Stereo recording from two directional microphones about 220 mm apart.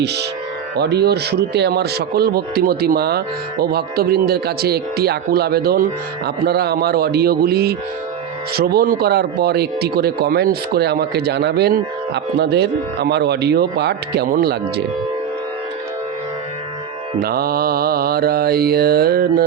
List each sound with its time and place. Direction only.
0.0 s speech: 50° right (ahead or behind)
17.2 s speech: 45° right (ahead or behind)